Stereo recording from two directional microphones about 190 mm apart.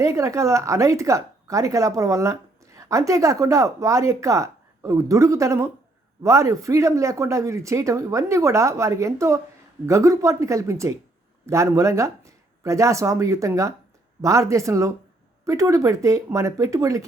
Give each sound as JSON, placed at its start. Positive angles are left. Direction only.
{"t": 0.0, "sound": "speech", "side_deg": -15}